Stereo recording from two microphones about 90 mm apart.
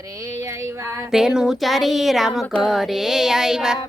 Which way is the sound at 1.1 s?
5° right (ahead or behind).